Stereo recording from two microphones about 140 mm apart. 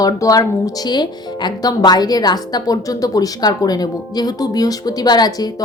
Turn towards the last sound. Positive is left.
turn(degrees=30)  # may be behind; listen again after turning